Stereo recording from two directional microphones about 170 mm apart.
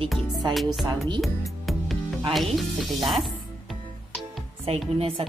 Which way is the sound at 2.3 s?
Centre (ahead or behind).